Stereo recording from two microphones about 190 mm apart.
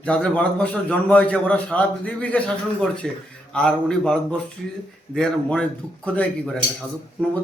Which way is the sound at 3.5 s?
5° left (ahead or behind).